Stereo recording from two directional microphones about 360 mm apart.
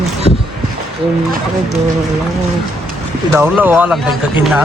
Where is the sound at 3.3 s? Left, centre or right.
Centre.